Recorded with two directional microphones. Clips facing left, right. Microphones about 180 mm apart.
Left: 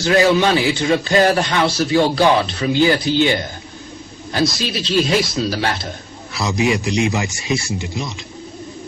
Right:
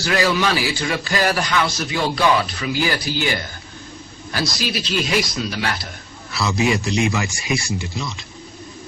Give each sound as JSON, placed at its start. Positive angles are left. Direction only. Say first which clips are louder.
{"t": 0.0, "sound": "a man's voice", "louder": "left 5 dB", "side_deg": 25}
{"t": 4.3, "sound": "a man's voice", "louder": "left 5 dB", "side_deg": 25}
{"t": 6.4, "sound": "a man's voice", "louder": "left 2 dB", "side_deg": 20}